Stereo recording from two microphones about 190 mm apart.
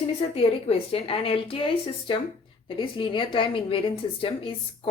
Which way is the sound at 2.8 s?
25° left (ahead or behind).